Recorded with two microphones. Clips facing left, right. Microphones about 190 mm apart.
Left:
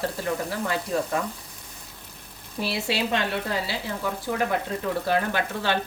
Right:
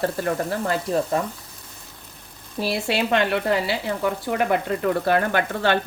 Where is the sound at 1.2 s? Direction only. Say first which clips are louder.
Right 3 dB; 35° right (ahead or behind).